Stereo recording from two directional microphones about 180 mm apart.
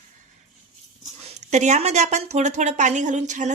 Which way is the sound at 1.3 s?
40° right (ahead or behind).